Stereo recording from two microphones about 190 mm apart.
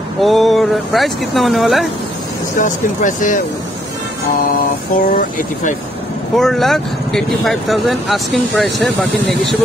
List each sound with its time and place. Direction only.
0.2 s speech: centre (ahead or behind)
2.6 s speech: 40° left (ahead or behind)
5.1 s speech: 45° left (ahead or behind)
6.3 s speech: centre (ahead or behind)